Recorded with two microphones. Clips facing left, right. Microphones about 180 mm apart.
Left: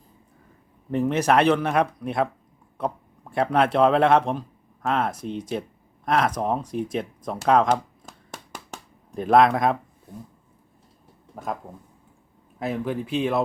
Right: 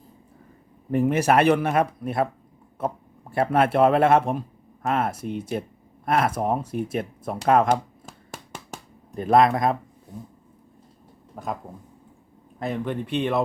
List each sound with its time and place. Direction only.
0.9 s speech: 10° right (ahead or behind)
8.5 s a sound: centre (ahead or behind)
11.3 s speech: centre (ahead or behind)
12.5 s speech: 5° left (ahead or behind)